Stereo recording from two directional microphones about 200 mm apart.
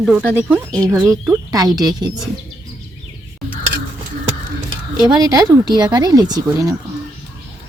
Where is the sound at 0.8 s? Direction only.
15° right (ahead or behind).